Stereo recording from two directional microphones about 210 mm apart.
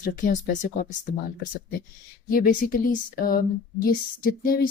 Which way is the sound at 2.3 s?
40° left (ahead or behind).